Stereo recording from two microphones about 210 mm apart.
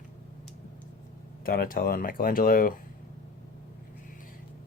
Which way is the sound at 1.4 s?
45° left (ahead or behind).